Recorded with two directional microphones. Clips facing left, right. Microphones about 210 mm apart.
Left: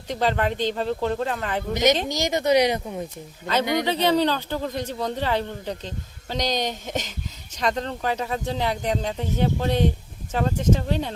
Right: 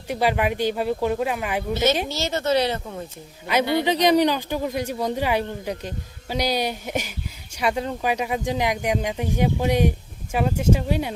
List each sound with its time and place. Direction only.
0.1 s speech: 10° right (ahead or behind)
1.7 s speech: 15° left (ahead or behind)
3.4 s speech: 10° right (ahead or behind)